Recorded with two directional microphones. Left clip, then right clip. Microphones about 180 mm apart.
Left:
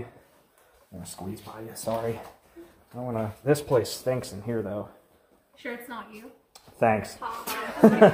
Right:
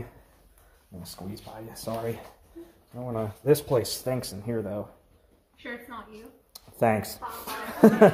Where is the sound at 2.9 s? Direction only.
Centre (ahead or behind).